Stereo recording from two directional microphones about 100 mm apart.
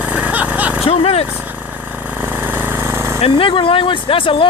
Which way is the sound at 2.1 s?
20° right (ahead or behind).